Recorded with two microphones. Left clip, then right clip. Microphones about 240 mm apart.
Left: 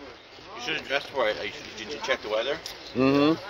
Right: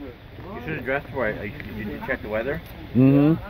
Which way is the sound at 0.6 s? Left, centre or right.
Left.